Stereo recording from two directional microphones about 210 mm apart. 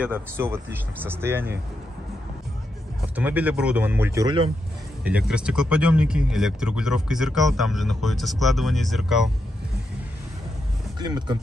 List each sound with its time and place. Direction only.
0.0 s speech: 10° right (ahead or behind)
3.2 s speech: 5° right (ahead or behind)
5.0 s speech: 5° right (ahead or behind)
11.0 s speech: 20° right (ahead or behind)